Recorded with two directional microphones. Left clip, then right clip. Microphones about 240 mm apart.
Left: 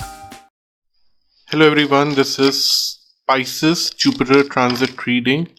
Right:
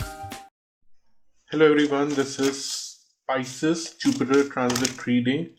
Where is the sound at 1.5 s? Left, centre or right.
Left.